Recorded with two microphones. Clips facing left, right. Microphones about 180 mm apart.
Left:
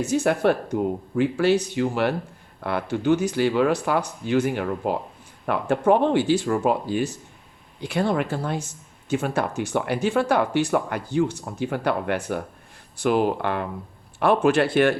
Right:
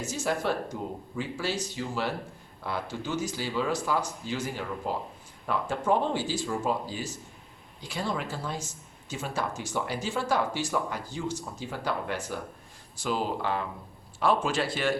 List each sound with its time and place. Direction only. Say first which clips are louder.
0.0 s speech: left 9 dB; 60° left (ahead or behind)